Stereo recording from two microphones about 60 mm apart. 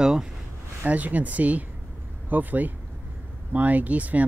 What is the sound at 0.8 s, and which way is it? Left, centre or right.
Speech, right.